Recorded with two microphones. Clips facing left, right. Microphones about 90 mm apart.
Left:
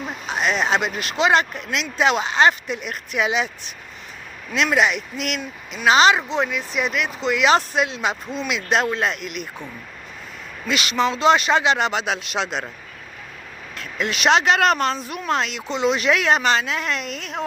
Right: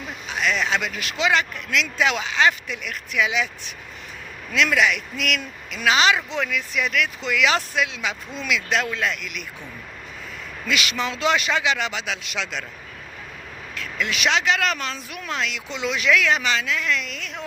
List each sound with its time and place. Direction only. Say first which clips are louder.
0.0 s speech: left 2 dB; 40° left (ahead or behind)
4.5 s speech: left 1 dB; 30° left (ahead or behind)
10.7 s speech: left 4 dB; 30° left (ahead or behind)
13.7 s speech: left 1 dB; 40° left (ahead or behind)